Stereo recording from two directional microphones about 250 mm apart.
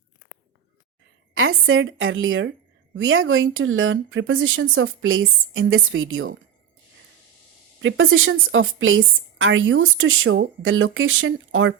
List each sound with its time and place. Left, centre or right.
1.3 s a woman's voice: right
7.8 s a woman's voice: right